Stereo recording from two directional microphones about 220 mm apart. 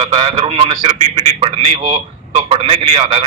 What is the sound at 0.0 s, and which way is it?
A man's voice, 25° right (ahead or behind).